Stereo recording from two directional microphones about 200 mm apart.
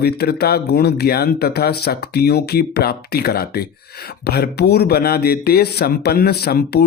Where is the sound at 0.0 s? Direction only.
50° left (ahead or behind).